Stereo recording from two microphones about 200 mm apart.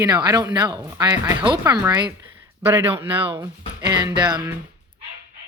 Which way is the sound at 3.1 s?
25° right (ahead or behind).